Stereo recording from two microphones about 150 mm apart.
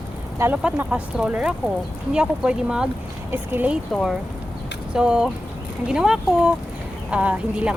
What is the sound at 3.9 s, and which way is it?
Speech, centre (ahead or behind).